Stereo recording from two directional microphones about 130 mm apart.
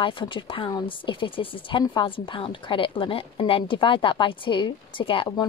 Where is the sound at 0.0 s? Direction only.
40° left (ahead or behind).